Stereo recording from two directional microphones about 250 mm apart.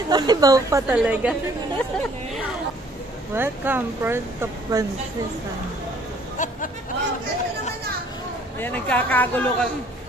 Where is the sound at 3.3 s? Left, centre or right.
Centre.